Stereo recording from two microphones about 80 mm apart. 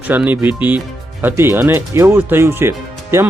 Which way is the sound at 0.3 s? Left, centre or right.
Right.